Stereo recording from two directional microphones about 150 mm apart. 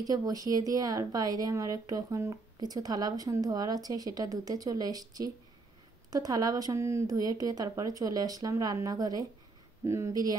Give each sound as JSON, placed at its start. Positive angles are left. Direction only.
{"t": 0.0, "sound": "speech", "side_deg": -25}